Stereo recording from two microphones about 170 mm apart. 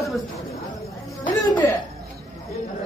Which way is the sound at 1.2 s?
25° left (ahead or behind).